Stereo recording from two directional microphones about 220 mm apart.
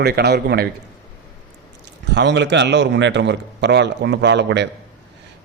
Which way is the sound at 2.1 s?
50° right (ahead or behind).